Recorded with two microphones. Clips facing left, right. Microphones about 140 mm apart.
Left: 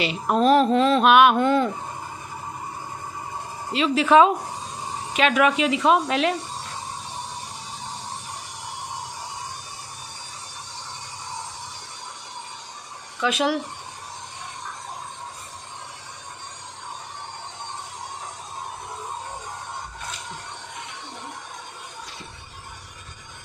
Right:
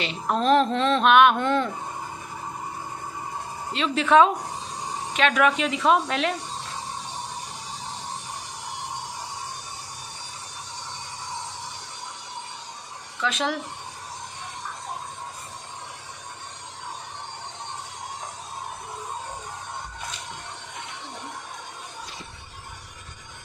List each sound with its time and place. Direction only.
0.0 s speech: 5° left (ahead or behind)
3.7 s speech: 5° left (ahead or behind)
13.2 s speech: 10° left (ahead or behind)